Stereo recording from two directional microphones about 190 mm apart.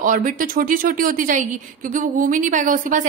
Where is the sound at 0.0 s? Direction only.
45° right (ahead or behind).